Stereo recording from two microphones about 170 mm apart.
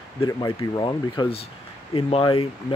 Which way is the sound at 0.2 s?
25° left (ahead or behind).